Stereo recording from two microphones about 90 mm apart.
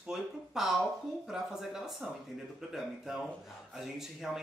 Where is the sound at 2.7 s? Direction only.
5° right (ahead or behind).